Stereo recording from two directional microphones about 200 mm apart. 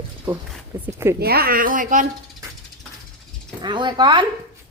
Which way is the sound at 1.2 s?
50° right (ahead or behind).